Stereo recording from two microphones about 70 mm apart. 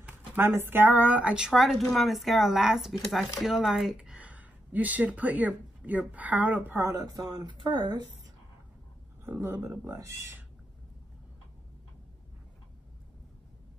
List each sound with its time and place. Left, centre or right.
0.4 s speech: right
6.8 s speech: right
9.2 s speech: right